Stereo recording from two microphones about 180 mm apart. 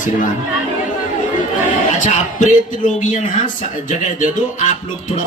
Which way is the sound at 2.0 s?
45° left (ahead or behind).